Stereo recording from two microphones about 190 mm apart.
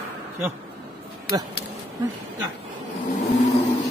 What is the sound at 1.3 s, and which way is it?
Speech, 20° right (ahead or behind).